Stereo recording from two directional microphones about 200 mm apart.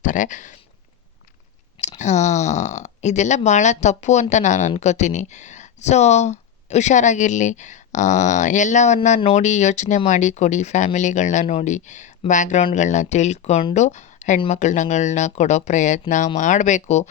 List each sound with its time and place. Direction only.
0.0 s speech: 40° left (ahead or behind)
1.8 s speech: 35° left (ahead or behind)